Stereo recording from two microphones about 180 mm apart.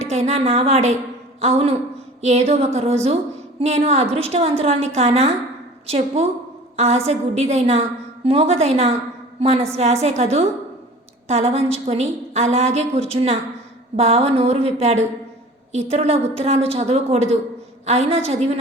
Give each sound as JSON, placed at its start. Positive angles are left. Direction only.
{"t": 0.0, "sound": "a woman's voice", "side_deg": -40}